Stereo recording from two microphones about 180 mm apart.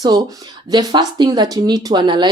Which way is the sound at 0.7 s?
25° right (ahead or behind).